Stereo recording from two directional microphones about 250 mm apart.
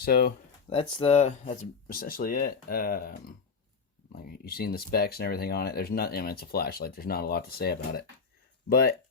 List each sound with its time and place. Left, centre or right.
0.0 s speech: left
0.7 s speech: left